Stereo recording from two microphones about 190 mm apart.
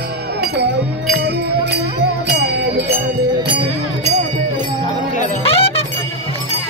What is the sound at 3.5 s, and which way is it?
Music, 30° right (ahead or behind).